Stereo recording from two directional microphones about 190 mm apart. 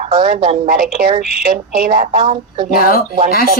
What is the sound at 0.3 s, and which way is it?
Speech, 25° right (ahead or behind).